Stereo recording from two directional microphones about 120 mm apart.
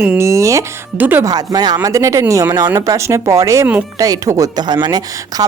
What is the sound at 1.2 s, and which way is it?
Speech, 30° right (ahead or behind).